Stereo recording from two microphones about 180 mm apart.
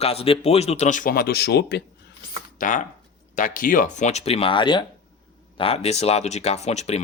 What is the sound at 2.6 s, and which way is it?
Speech, 45° left (ahead or behind).